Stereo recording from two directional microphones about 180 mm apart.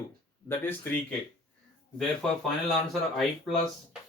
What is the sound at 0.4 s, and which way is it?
Speech, 10° left (ahead or behind).